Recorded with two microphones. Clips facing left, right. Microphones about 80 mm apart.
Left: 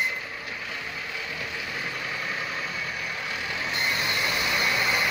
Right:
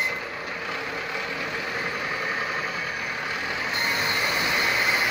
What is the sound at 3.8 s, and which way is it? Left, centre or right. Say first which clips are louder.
Vehicle: right 1 dB; right.